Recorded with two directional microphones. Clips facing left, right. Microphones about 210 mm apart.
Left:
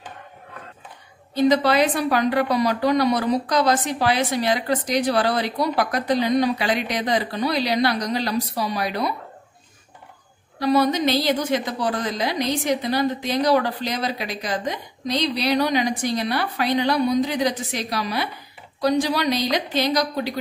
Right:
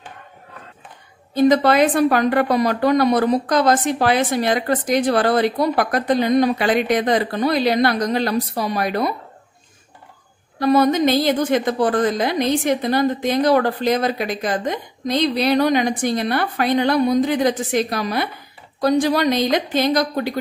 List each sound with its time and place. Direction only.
1.3 s a woman's voice: 50° right (ahead or behind)
10.6 s a woman's voice: 50° right (ahead or behind)